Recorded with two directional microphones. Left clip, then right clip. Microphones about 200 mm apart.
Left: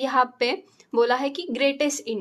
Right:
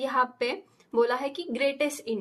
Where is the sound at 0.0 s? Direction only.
25° left (ahead or behind).